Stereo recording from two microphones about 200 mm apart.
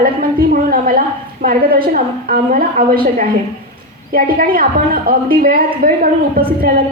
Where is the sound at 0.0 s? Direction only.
45° right (ahead or behind).